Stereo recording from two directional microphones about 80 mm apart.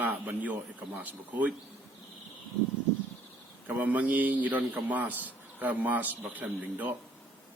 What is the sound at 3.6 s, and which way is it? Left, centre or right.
A man's voice, centre.